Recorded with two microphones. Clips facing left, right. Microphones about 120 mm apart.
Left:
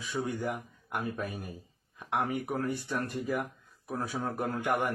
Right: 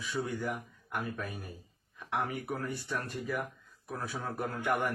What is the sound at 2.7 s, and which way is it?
Speech, 20° left (ahead or behind).